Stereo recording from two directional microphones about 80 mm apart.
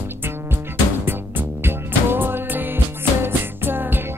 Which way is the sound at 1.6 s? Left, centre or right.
Right.